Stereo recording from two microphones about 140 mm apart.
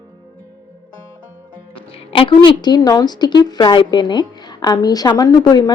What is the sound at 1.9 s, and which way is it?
A woman's voice, 40° left (ahead or behind).